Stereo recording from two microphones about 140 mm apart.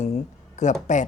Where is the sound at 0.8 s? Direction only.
60° left (ahead or behind).